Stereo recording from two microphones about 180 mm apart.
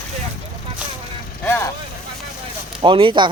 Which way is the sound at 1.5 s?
15° left (ahead or behind).